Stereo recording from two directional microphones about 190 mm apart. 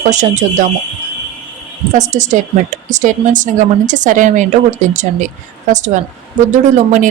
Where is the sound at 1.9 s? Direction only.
40° right (ahead or behind).